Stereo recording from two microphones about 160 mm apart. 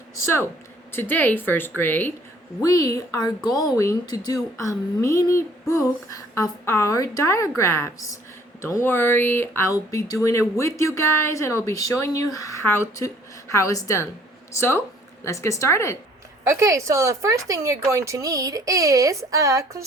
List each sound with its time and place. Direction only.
0.9 s speech: 10° left (ahead or behind)
2.6 s a sound: 20° left (ahead or behind)
8.6 s speech: 15° left (ahead or behind)
13.5 s a sound: 20° left (ahead or behind)
15.2 s speech: 20° left (ahead or behind)
16.5 s speech: 20° right (ahead or behind)